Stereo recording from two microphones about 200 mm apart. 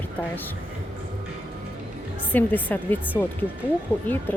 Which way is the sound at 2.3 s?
10° left (ahead or behind).